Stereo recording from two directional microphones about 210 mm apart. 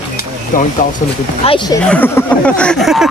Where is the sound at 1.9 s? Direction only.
10° left (ahead or behind).